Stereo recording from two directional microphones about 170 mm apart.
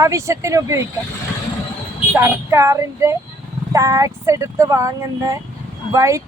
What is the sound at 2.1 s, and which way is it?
Speech, 15° right (ahead or behind).